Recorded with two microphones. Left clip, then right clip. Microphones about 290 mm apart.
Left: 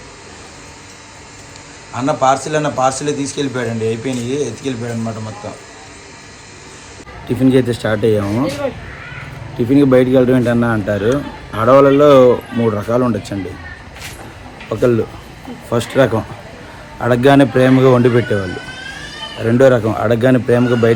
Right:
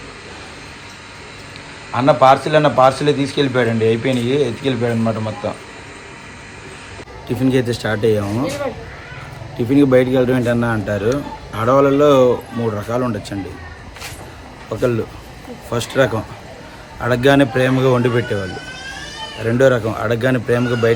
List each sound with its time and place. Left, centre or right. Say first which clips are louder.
1.9 s speech: right 3 dB; centre
3.8 s speech: right 3 dB; left
4.8 s speech: right 5 dB; centre
7.3 s speech: left 4 dB; centre
9.6 s speech: left 2 dB; centre
14.7 s speech: left 4 dB; centre
19.5 s speech: left 3 dB; centre